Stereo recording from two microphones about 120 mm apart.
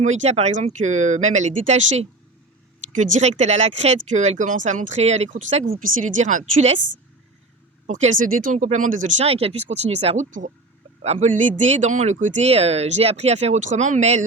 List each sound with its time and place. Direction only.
0.0 s speech: 80° right
7.9 s speech: 80° right
11.0 s speech: 65° right (ahead or behind)